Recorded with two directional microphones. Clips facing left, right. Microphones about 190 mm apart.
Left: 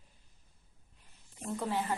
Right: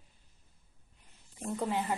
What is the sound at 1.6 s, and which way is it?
Speech, 15° right (ahead or behind).